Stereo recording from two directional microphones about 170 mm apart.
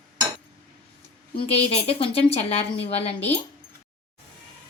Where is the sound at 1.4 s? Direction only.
35° left (ahead or behind).